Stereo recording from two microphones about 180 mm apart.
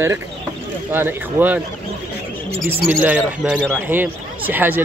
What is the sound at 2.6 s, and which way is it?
Speech, 10° right (ahead or behind).